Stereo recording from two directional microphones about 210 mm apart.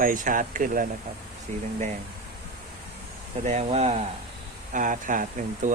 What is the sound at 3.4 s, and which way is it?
Speech, 35° right (ahead or behind).